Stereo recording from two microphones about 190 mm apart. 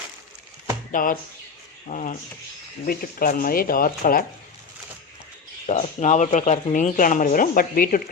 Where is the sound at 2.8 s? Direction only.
50° left (ahead or behind).